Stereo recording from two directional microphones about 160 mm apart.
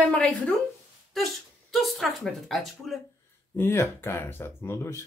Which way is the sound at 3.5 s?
15° left (ahead or behind).